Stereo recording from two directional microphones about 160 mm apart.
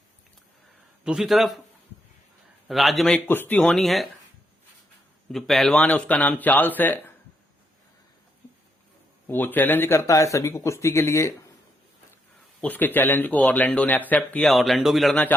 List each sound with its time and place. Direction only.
1.0 s speech: 5° right (ahead or behind)
2.6 s speech: centre (ahead or behind)
3.2 s speech: 10° left (ahead or behind)
5.3 s speech: centre (ahead or behind)
9.2 s speech: 10° left (ahead or behind)
12.6 s speech: 10° left (ahead or behind)